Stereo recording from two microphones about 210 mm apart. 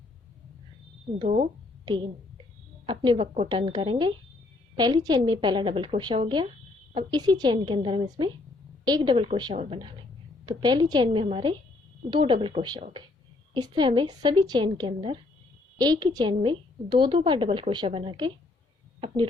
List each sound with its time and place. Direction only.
2.8 s a woman's voice: 20° right (ahead or behind)